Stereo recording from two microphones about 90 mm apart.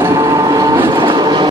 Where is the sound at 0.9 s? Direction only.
55° right (ahead or behind).